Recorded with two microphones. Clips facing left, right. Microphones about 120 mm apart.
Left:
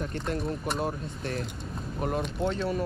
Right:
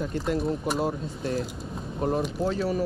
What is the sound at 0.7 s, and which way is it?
Speech, 25° right (ahead or behind).